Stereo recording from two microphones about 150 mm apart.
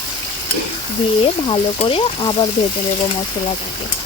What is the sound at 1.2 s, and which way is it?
Speech, 35° left (ahead or behind).